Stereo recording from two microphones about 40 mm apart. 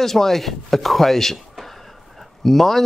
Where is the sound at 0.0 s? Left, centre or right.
Centre.